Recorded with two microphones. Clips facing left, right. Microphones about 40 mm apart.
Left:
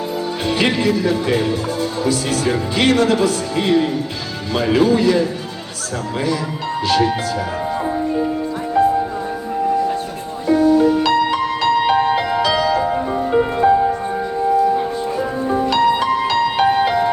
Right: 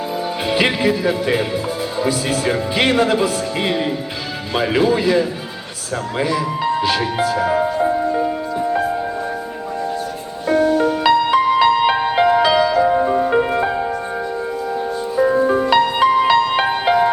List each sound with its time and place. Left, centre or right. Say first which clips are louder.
0.4 s speech: right 1 dB; centre
10.4 s music: left 2 dB; right
11.0 s music: right 3 dB; centre
15.3 s music: right 6 dB; right
15.7 s music: right 1 dB; centre